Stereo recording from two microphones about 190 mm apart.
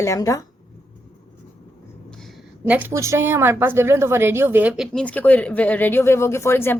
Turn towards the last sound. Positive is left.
turn(degrees=10)  # may be behind; listen again after turning